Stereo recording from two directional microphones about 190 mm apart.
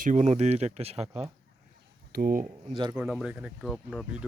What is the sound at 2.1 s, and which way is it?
Speech, 50° right (ahead or behind).